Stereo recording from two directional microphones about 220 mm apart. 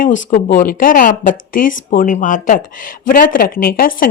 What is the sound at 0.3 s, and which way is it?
Speech, 35° left (ahead or behind).